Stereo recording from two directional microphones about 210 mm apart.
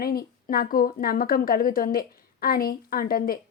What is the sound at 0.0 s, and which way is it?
A woman's voice, 45° left (ahead or behind).